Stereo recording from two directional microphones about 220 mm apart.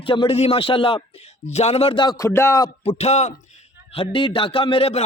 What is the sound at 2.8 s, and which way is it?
A man's voice, 30° left (ahead or behind).